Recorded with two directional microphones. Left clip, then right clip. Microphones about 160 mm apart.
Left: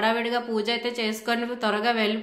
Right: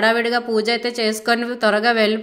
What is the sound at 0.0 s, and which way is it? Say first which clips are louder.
A woman's voice: right 7 dB; 40° right (ahead or behind).